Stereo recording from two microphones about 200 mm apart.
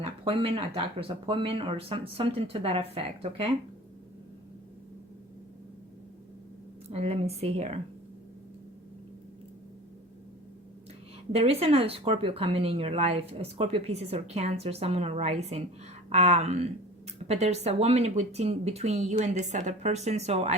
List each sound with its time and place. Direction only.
0.0 s speech: 30° right (ahead or behind)
6.9 s speech: 30° right (ahead or behind)
11.3 s speech: 30° right (ahead or behind)